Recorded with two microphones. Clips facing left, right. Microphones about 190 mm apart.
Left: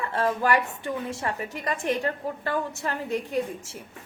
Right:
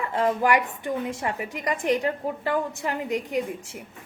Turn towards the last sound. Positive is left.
turn(degrees=-15)  # may be behind; listen again after turning